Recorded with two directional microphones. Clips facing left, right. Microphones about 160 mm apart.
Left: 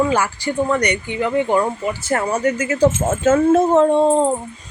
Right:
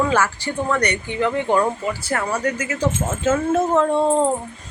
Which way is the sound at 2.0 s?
25° left (ahead or behind).